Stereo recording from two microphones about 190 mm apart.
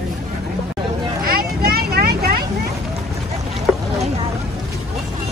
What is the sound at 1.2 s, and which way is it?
Vehicle, 55° right (ahead or behind).